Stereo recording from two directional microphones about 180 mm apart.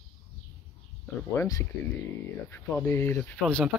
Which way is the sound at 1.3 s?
20° left (ahead or behind).